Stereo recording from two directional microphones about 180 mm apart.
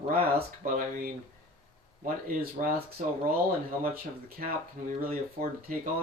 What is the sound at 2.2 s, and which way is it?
Speech, 50° right (ahead or behind).